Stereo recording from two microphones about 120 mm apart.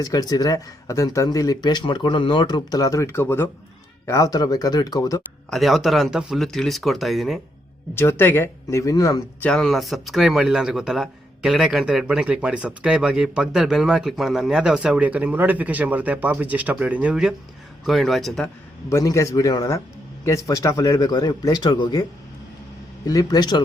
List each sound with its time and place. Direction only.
0.0 s speech: 30° left (ahead or behind)
5.5 s speech: centre (ahead or behind)
7.9 s speech: 20° left (ahead or behind)
9.4 s speech: 5° left (ahead or behind)
18.9 s speech: 25° left (ahead or behind)
23.0 s speech: 30° left (ahead or behind)